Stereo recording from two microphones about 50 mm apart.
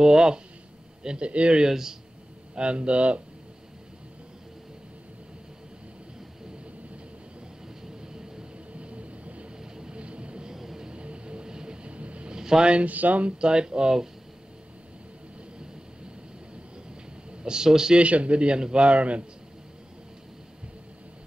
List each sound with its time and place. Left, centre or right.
0.0 s a man's voice: centre
1.7 s speech: centre
2.5 s a man's voice: centre
8.0 s vehicle: centre
10.9 s a sound: right
13.4 s speech: centre
17.3 s speech: centre
18.0 s a man's voice: right